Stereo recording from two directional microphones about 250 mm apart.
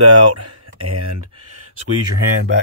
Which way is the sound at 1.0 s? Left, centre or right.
Right.